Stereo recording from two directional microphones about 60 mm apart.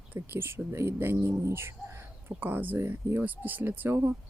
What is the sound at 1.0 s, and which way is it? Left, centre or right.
Speech, right.